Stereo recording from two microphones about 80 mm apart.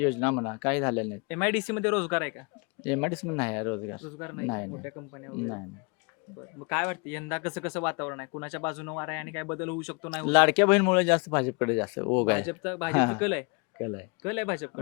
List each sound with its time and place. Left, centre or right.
0.0 s speech: left
6.7 s speech: left
10.1 s speech: centre